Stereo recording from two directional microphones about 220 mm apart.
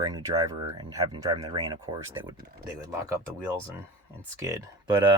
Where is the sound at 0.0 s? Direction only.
15° right (ahead or behind).